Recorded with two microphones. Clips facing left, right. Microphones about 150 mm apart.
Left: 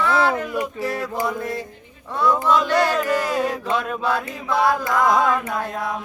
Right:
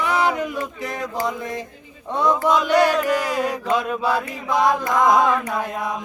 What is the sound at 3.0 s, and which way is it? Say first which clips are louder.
Speech: even; 15° right (ahead or behind).